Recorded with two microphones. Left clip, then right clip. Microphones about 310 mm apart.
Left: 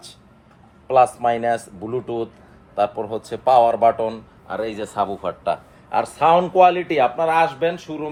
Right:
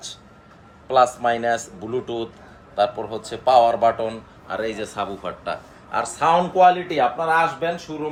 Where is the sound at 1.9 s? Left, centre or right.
Left.